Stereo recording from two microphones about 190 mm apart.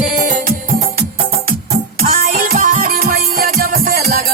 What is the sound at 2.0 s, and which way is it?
Music, 50° right (ahead or behind).